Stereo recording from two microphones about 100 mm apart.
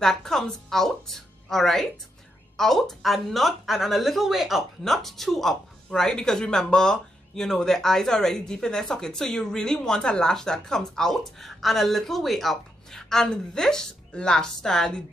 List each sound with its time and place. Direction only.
0.0 s speech: 5° left (ahead or behind)